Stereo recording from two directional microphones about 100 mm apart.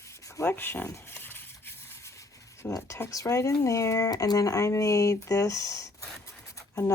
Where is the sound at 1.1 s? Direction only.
20° left (ahead or behind).